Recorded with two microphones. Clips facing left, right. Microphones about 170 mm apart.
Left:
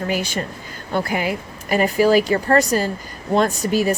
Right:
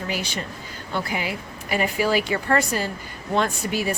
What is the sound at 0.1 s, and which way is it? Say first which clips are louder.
A woman's voice: left 6 dB; 50° left (ahead or behind).